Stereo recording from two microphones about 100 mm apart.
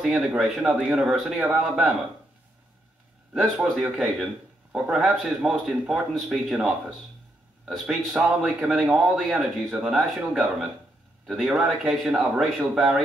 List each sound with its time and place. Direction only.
0.0 s a man's voice: 10° right (ahead or behind)
3.5 s a man's voice: 10° right (ahead or behind)
8.1 s a man's voice: 15° right (ahead or behind)
8.5 s speech: 5° right (ahead or behind)